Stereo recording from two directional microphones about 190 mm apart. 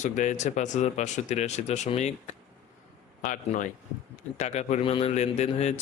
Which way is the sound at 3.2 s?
40° left (ahead or behind).